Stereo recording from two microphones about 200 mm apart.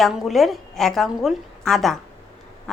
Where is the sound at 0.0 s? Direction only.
Centre (ahead or behind).